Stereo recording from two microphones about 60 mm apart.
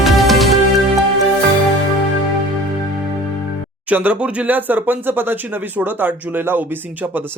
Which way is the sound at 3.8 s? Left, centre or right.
Right.